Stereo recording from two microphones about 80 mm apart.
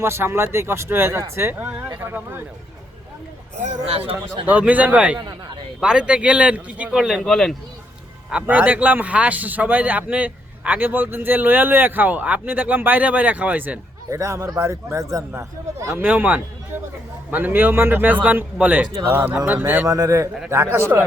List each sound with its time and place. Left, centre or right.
0.0 s a man's voice: right
4.4 s a man's voice: centre
6.9 s speech: centre
7.3 s speech: centre
8.3 s a man's voice: centre
14.1 s speech: right
16.0 s a man's voice: right
19.9 s speech: right